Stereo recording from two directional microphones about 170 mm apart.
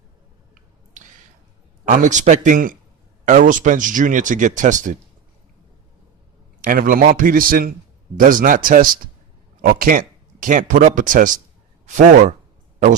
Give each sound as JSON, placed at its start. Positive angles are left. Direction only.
{"t": 1.8, "sound": "speech", "side_deg": -50}
{"t": 6.6, "sound": "a man's voice", "side_deg": -55}